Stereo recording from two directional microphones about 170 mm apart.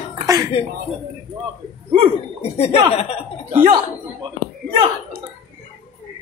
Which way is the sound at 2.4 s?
35° left (ahead or behind).